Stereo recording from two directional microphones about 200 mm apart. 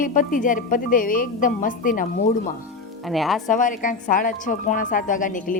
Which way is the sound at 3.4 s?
40° left (ahead or behind).